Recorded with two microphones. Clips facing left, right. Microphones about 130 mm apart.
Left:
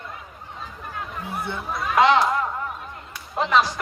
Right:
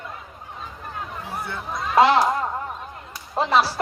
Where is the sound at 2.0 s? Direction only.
30° right (ahead or behind).